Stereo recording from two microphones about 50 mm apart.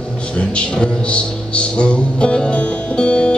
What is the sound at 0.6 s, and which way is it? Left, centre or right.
Music, left.